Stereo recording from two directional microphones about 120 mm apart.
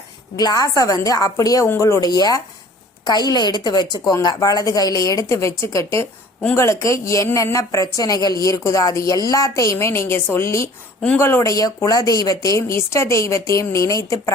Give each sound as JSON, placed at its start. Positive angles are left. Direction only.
{"t": 0.3, "sound": "a woman's voice", "side_deg": 30}